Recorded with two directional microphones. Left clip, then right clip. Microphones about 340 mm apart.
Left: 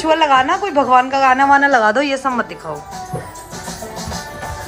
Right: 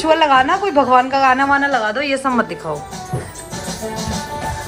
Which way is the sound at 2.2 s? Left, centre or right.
Centre.